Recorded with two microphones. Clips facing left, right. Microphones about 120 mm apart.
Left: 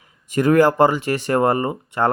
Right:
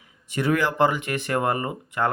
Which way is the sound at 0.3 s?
45° left (ahead or behind).